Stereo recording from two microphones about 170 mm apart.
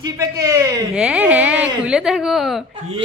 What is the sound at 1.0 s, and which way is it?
A woman's voice, 5° right (ahead or behind).